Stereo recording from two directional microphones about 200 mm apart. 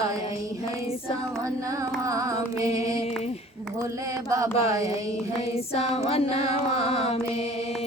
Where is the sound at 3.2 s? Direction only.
30° left (ahead or behind).